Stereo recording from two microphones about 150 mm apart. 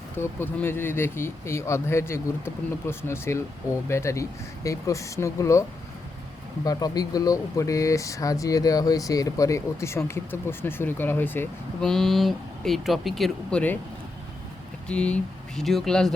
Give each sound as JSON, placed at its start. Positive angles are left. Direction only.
{"t": 0.2, "sound": "speech", "side_deg": 15}
{"t": 6.7, "sound": "speech", "side_deg": 25}
{"t": 11.8, "sound": "speech", "side_deg": 5}
{"t": 14.8, "sound": "speech", "side_deg": 5}